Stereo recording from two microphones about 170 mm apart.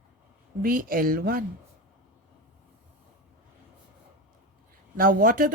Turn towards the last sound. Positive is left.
turn(degrees=-55)  # may be behind; listen again after turning